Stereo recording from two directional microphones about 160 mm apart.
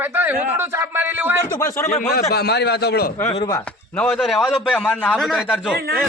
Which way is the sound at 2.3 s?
90° left.